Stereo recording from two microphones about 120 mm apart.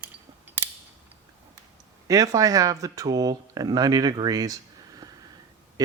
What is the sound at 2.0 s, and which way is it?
Speech, 30° right (ahead or behind).